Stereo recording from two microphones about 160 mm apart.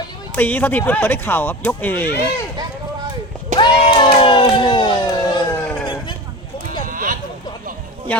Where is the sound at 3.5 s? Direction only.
30° left (ahead or behind).